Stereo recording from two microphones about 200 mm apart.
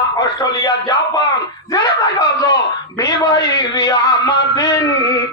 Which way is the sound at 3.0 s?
20° left (ahead or behind).